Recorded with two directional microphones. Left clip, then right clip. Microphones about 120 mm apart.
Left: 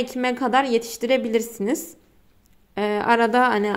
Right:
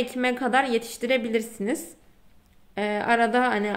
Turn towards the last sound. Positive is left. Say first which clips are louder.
# left 4 dB
turn(degrees=30)  # may be behind; listen again after turning